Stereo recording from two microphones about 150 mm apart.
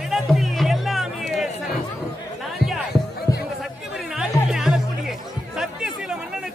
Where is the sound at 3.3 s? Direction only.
25° left (ahead or behind).